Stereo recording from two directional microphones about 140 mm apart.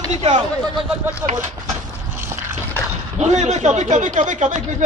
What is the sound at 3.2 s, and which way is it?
A man's voice, 55° right (ahead or behind).